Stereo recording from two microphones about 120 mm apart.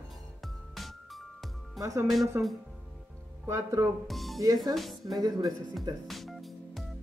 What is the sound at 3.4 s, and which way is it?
Speech, 30° right (ahead or behind).